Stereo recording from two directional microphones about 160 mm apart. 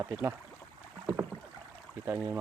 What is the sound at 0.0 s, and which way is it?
Speech, 15° right (ahead or behind).